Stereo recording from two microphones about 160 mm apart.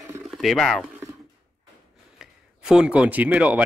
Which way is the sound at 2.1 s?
5° right (ahead or behind).